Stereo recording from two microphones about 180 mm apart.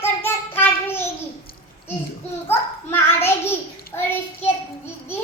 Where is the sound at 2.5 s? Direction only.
10° left (ahead or behind).